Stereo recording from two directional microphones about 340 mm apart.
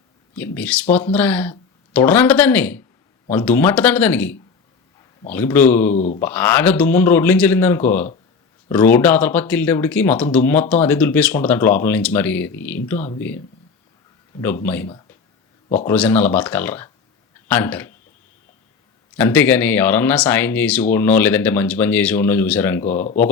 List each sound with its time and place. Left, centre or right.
0.3 s speech: centre
5.9 s speech: left
6.1 s speech: centre
14.4 s a man's voice: centre
19.1 s speech: centre